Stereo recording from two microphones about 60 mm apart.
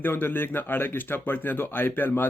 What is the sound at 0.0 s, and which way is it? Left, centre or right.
Speech, left.